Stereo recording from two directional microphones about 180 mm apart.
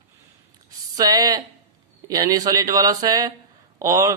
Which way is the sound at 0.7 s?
20° right (ahead or behind).